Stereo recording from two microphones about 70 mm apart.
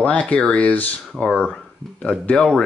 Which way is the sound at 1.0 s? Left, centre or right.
Centre.